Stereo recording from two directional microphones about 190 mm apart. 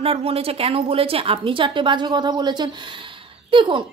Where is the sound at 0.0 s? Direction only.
30° right (ahead or behind).